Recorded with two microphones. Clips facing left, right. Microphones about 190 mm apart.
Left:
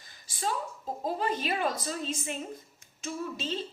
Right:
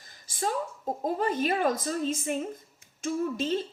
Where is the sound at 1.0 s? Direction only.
50° right (ahead or behind).